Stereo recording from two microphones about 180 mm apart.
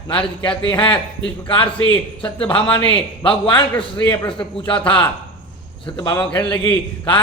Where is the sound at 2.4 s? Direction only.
10° left (ahead or behind).